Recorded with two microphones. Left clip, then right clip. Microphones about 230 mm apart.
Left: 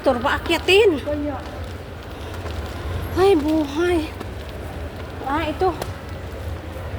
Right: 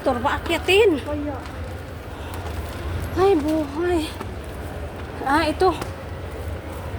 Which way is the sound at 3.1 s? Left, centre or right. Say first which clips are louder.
Left 2 dB; centre.